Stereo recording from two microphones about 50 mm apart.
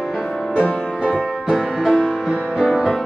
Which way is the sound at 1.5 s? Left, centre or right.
Centre.